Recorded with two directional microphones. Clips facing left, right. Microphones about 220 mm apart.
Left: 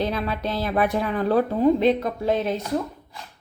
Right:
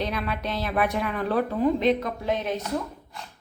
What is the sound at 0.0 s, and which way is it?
Speech, 30° left (ahead or behind).